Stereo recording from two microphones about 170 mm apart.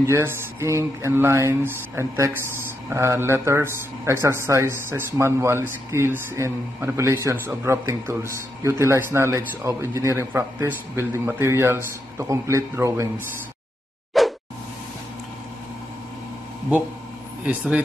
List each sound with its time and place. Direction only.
0.0 s a man's voice: 15° right (ahead or behind)
14.2 s plop: centre (ahead or behind)
17.5 s a man's voice: 10° right (ahead or behind)